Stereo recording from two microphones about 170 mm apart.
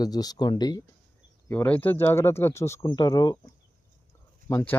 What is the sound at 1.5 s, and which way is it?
Speech, 10° left (ahead or behind).